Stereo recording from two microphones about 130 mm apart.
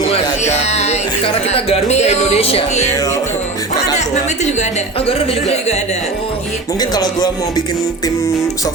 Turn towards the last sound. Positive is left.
turn(degrees=30)  # may be behind; listen again after turning